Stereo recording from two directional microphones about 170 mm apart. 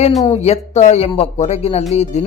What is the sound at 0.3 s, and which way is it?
A man's voice, 35° left (ahead or behind).